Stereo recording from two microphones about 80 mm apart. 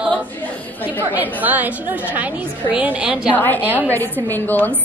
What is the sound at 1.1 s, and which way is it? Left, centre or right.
A woman's voice, right.